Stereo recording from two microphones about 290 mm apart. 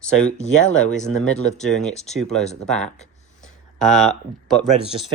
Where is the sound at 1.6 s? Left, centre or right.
Centre.